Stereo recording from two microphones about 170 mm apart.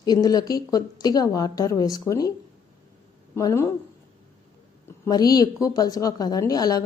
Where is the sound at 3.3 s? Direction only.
15° left (ahead or behind).